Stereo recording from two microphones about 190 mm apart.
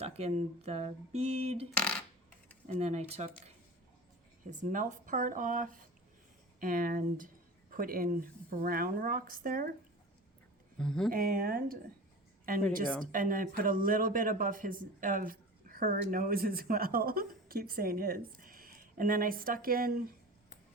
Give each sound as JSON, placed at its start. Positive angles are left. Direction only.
{"t": 0.0, "sound": "speech", "side_deg": -30}
{"t": 2.6, "sound": "speech", "side_deg": -35}
{"t": 4.5, "sound": "speech", "side_deg": -45}
{"t": 10.8, "sound": "speech", "side_deg": 5}
{"t": 11.1, "sound": "speech", "side_deg": -50}
{"t": 13.1, "sound": "speech", "side_deg": -45}